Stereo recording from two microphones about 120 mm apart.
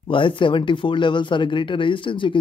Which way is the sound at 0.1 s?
45° left (ahead or behind).